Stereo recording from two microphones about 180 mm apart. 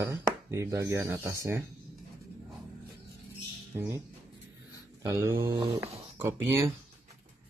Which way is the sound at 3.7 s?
15° right (ahead or behind).